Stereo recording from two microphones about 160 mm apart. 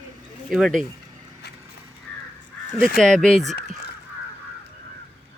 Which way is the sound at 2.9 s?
5° left (ahead or behind).